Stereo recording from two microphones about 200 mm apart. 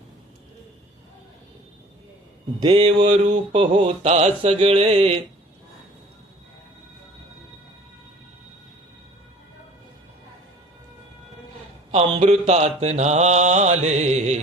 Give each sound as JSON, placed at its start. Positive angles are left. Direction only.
{"t": 2.6, "sound": "mantra", "side_deg": -30}
{"t": 11.9, "sound": "mantra", "side_deg": -30}